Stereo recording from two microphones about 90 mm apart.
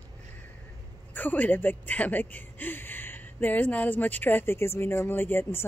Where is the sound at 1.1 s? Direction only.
20° left (ahead or behind).